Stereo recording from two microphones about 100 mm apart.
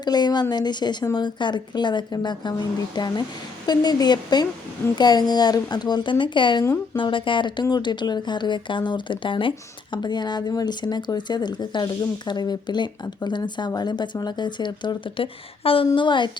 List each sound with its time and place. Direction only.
0.0 s speech: 45° left (ahead or behind)
15.6 s a woman's voice: 65° left (ahead or behind)
16.0 s speech: 50° left (ahead or behind)